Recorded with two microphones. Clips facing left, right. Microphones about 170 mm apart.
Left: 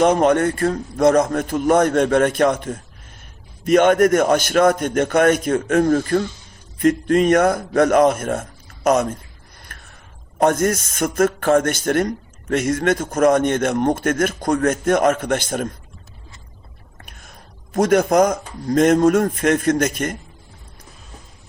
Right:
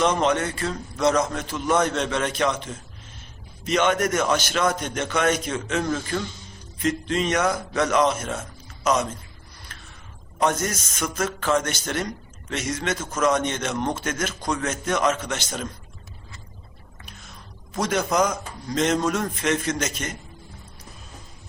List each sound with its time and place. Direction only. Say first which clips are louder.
0.0 s a man's voice: left 7 dB; 50° left (ahead or behind)
9.7 s a sound: left 3 dB; 55° left (ahead or behind)
10.3 s a man's voice: left 7 dB; 55° left (ahead or behind)
17.0 s speech: left 1 dB; 50° left (ahead or behind)